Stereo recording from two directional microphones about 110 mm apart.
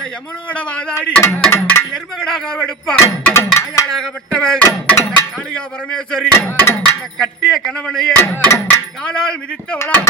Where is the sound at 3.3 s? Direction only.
25° left (ahead or behind).